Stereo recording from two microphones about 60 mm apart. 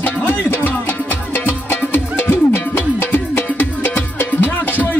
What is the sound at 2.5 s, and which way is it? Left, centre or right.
Music, left.